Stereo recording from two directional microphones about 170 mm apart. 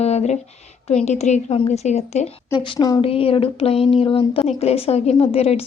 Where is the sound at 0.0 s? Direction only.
40° left (ahead or behind).